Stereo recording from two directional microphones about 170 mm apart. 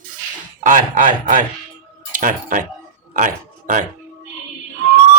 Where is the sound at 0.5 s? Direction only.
50° right (ahead or behind).